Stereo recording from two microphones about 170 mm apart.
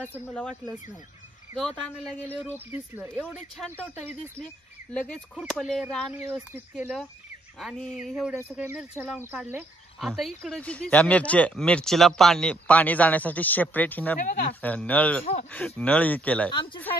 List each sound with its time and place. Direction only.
0.2 s speech: 5° left (ahead or behind)
2.7 s speech: 10° right (ahead or behind)
4.9 s speech: 10° left (ahead or behind)
14.2 s speech: 55° left (ahead or behind)
14.6 s speech: 10° left (ahead or behind)
16.5 s speech: 30° left (ahead or behind)